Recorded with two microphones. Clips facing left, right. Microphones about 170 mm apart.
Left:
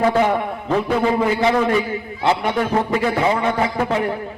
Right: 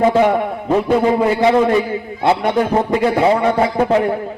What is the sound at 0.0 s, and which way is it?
A man's voice, 20° right (ahead or behind).